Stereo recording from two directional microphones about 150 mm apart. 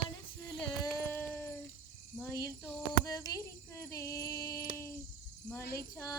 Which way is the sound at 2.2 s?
20° left (ahead or behind).